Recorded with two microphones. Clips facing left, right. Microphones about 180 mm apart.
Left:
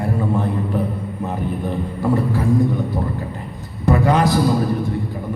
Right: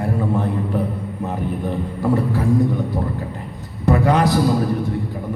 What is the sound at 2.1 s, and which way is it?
Speech, 65° right (ahead or behind).